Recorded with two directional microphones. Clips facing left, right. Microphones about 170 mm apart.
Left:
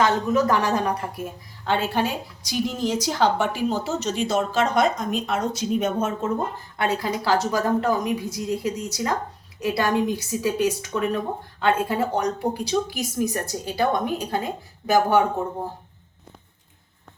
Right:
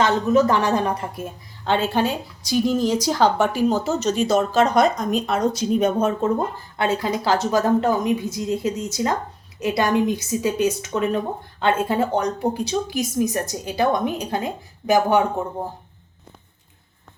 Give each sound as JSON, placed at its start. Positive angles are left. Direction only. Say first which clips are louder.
{"t": 0.0, "sound": "a woman's voice", "louder": "right 3 dB", "side_deg": -25}